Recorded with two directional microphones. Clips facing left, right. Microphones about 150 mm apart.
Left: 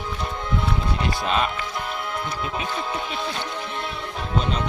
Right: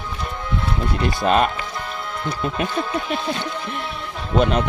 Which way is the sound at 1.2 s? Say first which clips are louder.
Right 7 dB; 50° right (ahead or behind).